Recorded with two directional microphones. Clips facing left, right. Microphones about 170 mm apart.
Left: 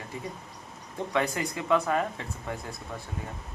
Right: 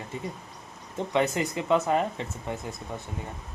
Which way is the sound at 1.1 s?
20° right (ahead or behind).